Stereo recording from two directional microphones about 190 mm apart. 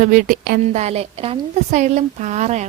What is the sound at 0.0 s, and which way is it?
Speech, 45° right (ahead or behind).